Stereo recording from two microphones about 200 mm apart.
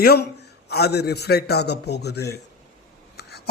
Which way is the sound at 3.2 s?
55° left (ahead or behind).